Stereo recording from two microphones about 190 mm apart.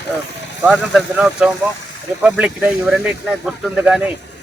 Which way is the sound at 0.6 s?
Centre (ahead or behind).